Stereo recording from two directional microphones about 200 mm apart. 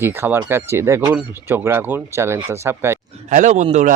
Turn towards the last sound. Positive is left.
turn(degrees=-35)  # may be behind; listen again after turning